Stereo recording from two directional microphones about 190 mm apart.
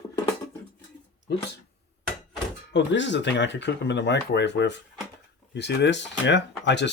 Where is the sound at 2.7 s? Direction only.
70° left (ahead or behind).